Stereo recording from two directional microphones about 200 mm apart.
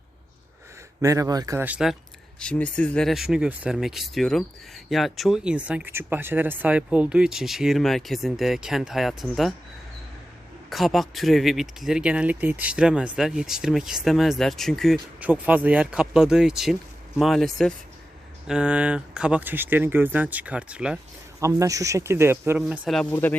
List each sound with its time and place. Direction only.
1.0 s speech: 15° right (ahead or behind)
2.4 s speech: 5° left (ahead or behind)
10.7 s speech: centre (ahead or behind)
21.4 s speech: 15° right (ahead or behind)
23.1 s speech: 10° left (ahead or behind)